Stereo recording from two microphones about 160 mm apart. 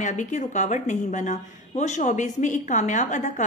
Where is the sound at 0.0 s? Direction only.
50° left (ahead or behind).